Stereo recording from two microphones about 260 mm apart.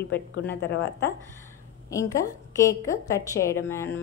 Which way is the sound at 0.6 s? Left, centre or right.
Left.